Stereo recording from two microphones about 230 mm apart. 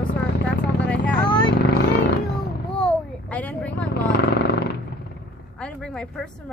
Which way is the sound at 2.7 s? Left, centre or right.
Centre.